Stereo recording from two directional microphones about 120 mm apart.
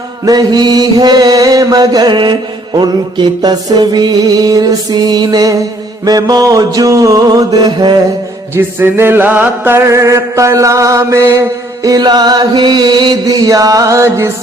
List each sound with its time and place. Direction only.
0.3 s mantra: 35° right (ahead or behind)
8.5 s chant: 20° right (ahead or behind)
11.8 s mantra: 30° right (ahead or behind)